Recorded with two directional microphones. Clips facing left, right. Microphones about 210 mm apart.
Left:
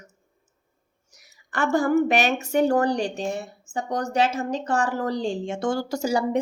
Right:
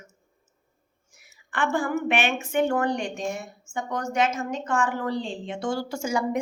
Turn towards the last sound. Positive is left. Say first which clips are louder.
# left 3 dB
turn(degrees=35)  # may be behind; listen again after turning